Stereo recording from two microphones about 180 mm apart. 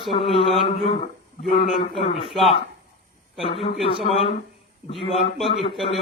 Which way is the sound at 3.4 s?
30° left (ahead or behind).